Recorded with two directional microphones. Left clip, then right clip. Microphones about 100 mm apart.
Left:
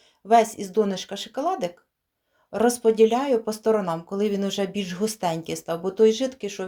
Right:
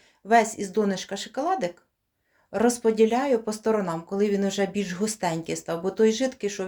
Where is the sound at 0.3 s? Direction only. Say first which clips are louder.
Left 2 dB; 10° left (ahead or behind).